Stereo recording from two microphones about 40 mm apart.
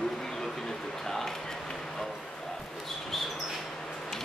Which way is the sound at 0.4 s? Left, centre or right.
Centre.